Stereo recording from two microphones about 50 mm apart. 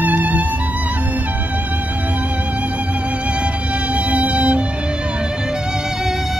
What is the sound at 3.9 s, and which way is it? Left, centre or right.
Music, right.